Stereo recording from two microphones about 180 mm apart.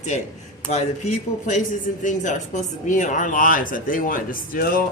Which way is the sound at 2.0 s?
45° left (ahead or behind).